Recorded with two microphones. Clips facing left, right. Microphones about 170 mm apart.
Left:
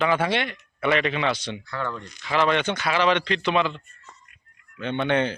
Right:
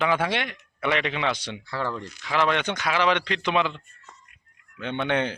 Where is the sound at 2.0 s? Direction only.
10° right (ahead or behind).